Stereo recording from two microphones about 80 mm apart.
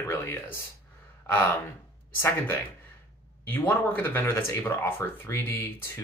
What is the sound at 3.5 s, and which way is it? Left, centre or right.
Speech, left.